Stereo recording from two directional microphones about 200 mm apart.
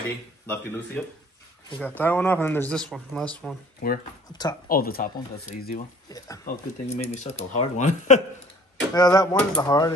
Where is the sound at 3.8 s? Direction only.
45° left (ahead or behind).